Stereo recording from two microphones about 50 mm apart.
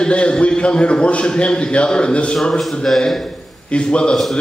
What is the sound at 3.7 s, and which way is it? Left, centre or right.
Speech, centre.